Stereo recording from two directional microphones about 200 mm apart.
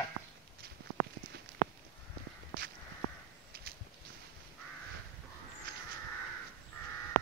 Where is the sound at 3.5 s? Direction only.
50° right (ahead or behind).